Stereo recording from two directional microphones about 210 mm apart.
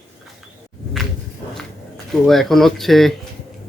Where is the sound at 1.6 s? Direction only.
Centre (ahead or behind).